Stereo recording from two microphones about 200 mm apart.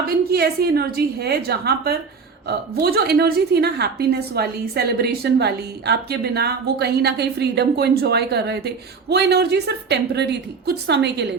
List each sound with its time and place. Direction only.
0.1 s a woman's voice: 50° right (ahead or behind)